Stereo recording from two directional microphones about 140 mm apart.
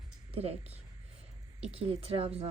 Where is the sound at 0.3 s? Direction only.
45° right (ahead or behind).